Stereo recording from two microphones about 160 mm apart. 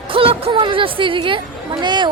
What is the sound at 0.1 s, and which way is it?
Speech, 35° right (ahead or behind).